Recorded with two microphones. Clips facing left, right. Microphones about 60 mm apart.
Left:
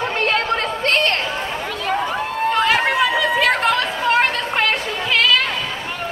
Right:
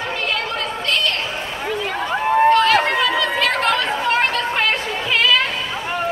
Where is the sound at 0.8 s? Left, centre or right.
Left.